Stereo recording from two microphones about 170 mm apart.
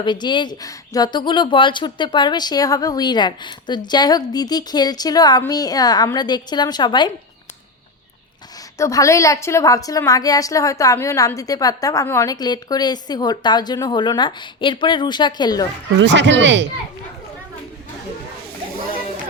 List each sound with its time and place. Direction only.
0.0 s a woman's voice: 25° left (ahead or behind)
8.8 s a woman's voice: 20° left (ahead or behind)
16.0 s speech: 90° right